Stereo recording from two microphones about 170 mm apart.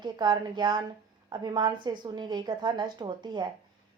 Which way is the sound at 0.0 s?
25° right (ahead or behind).